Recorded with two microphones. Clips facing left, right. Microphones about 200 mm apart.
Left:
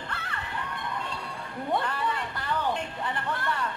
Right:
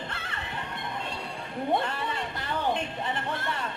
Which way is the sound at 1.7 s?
25° right (ahead or behind).